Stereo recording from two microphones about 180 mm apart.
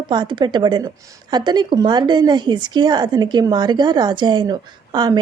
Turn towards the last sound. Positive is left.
turn(degrees=-25)  # may be behind; listen again after turning